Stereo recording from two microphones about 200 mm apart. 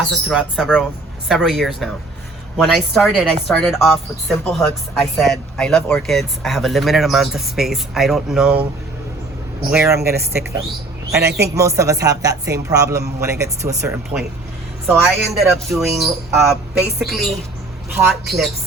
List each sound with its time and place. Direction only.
0.1 s speech: centre (ahead or behind)
9.7 s a man's voice: 15° right (ahead or behind)
10.0 s a man's voice: 50° right (ahead or behind)
11.5 s a man's voice: 15° right (ahead or behind)